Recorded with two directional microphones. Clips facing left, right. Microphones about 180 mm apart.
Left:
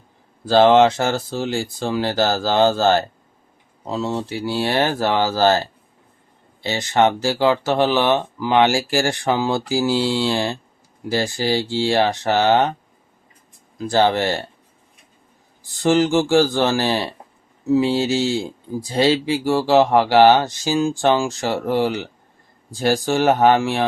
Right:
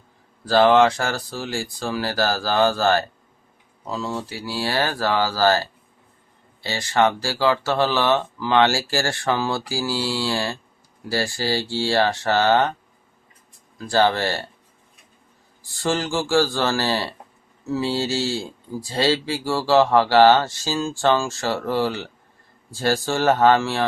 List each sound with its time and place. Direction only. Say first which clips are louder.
0.4 s speech: left 3 dB; 25° left (ahead or behind)
13.7 s speech: left 2 dB; 20° left (ahead or behind)
15.7 s speech: left 7 dB; 20° left (ahead or behind)